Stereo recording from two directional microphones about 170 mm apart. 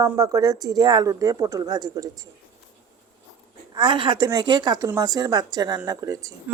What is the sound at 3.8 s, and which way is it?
Speech, 30° right (ahead or behind).